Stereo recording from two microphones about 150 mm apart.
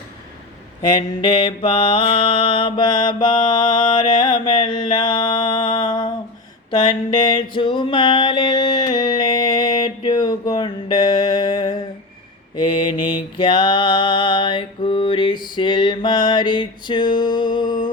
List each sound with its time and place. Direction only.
1.2 s mantra: 35° left (ahead or behind)
6.7 s a sound: 30° left (ahead or behind)
12.5 s mantra: 30° left (ahead or behind)